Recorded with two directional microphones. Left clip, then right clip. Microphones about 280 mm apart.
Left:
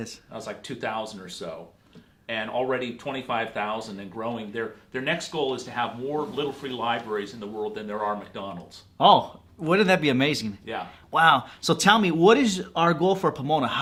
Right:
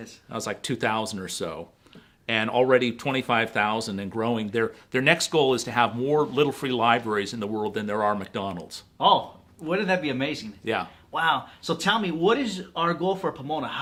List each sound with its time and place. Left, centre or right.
0.3 s speech: right
9.0 s speech: left
10.7 s speech: right
11.1 s speech: left